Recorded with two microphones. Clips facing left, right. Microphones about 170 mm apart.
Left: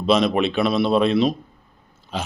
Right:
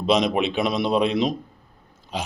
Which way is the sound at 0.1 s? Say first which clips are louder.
Left 2 dB; 15° right (ahead or behind).